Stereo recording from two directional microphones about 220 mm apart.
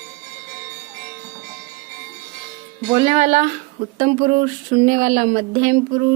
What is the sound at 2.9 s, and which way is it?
Speech, 25° right (ahead or behind).